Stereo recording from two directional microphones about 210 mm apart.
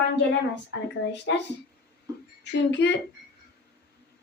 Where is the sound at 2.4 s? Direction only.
55° left (ahead or behind).